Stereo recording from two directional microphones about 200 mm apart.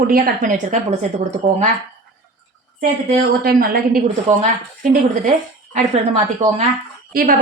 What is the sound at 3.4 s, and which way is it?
A woman's voice, 45° right (ahead or behind).